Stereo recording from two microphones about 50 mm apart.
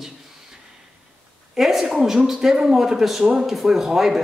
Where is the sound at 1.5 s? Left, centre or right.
Centre.